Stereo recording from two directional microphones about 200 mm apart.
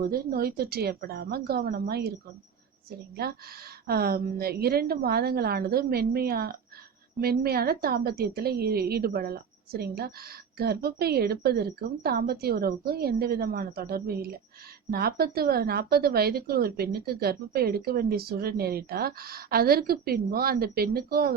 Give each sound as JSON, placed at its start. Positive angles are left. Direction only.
{"t": 0.1, "sound": "a woman's voice", "side_deg": -50}
{"t": 3.2, "sound": "a woman's voice", "side_deg": -50}